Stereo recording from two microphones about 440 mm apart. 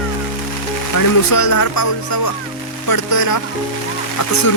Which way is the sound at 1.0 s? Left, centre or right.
Left.